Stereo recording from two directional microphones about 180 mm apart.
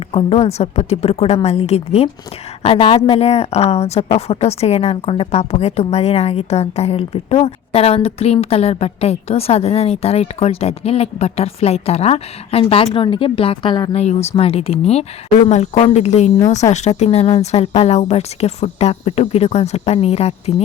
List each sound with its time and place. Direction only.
0.1 s a woman's voice: 35° left (ahead or behind)
13.9 s a woman's voice: 35° left (ahead or behind)
16.6 s a woman's voice: 15° left (ahead or behind)
17.0 s a woman's voice: 35° left (ahead or behind)